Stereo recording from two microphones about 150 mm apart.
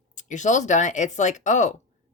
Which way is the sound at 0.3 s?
55° left (ahead or behind).